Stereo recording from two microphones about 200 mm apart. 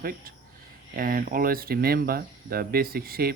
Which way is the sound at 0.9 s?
45° right (ahead or behind).